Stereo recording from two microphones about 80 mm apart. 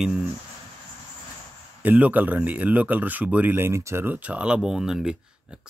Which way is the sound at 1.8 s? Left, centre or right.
Centre.